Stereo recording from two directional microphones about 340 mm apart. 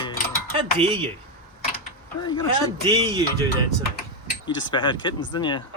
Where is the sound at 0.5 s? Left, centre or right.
Centre.